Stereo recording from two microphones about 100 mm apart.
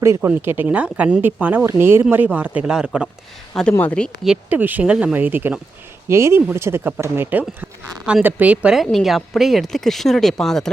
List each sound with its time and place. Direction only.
0.0 s speech: 20° right (ahead or behind)
3.5 s speech: 10° left (ahead or behind)
4.4 s speech: 15° right (ahead or behind)
8.7 s speech: centre (ahead or behind)